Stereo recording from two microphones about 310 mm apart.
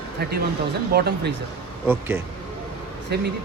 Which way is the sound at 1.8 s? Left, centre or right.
Centre.